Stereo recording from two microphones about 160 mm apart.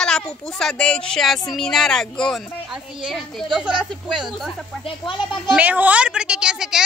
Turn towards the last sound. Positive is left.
turn(degrees=-5)  # may be behind; listen again after turning